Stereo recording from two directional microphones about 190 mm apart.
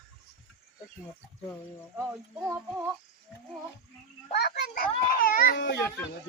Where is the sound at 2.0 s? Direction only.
15° right (ahead or behind).